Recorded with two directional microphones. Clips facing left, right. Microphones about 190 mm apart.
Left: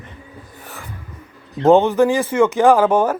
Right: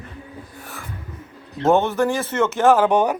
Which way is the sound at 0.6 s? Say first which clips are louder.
Left 4 dB; 15° left (ahead or behind).